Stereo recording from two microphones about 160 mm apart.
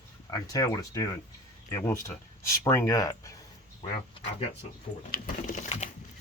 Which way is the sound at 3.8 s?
40° left (ahead or behind).